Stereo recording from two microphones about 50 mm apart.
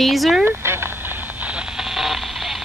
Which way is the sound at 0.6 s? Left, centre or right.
Right.